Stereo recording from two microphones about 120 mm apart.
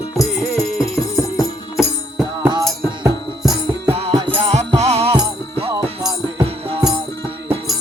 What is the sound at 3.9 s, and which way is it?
Music, 60° right (ahead or behind).